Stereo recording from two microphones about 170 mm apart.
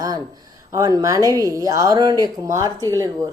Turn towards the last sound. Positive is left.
turn(degrees=-20)  # may be behind; listen again after turning